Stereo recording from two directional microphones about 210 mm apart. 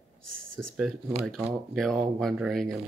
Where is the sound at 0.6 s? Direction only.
Centre (ahead or behind).